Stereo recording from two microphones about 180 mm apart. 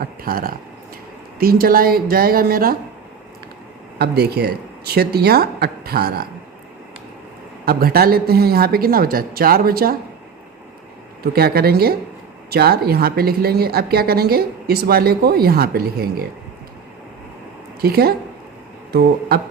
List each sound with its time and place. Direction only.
0.0 s a woman's voice: 55° right (ahead or behind)
3.9 s a woman's voice: 60° right (ahead or behind)
7.6 s a woman's voice: 55° right (ahead or behind)
11.2 s a woman's voice: 60° right (ahead or behind)
17.8 s a woman's voice: 60° right (ahead or behind)